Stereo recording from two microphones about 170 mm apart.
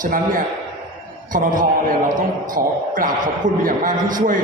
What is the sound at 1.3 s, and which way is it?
Speech, 55° right (ahead or behind).